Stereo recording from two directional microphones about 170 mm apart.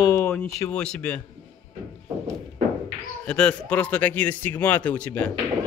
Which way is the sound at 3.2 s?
5° left (ahead or behind).